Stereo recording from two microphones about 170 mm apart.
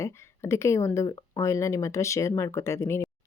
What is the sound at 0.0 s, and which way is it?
Speech, 15° left (ahead or behind).